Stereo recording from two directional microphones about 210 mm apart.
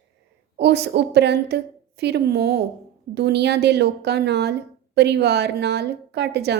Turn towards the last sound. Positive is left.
turn(degrees=-50)  # may be behind; listen again after turning